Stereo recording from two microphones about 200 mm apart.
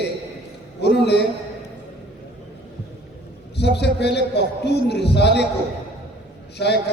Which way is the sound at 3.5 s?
60° left (ahead or behind).